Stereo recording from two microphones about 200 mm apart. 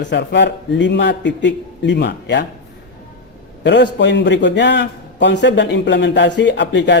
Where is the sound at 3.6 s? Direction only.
60° left (ahead or behind).